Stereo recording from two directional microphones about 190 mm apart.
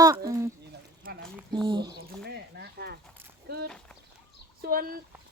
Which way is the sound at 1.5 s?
25° right (ahead or behind).